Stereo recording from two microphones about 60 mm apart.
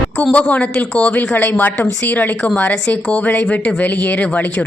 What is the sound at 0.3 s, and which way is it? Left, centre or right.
A woman's voice, left.